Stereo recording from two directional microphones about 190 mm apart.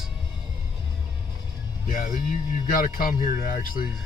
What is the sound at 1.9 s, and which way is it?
Music, 45° left (ahead or behind).